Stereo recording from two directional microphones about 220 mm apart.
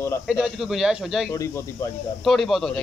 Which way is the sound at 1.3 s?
15° left (ahead or behind).